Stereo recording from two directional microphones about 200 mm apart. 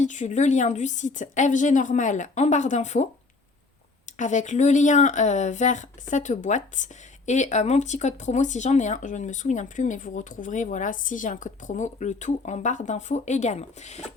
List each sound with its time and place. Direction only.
0.0 s speech: 35° left (ahead or behind)
4.2 s speech: 40° left (ahead or behind)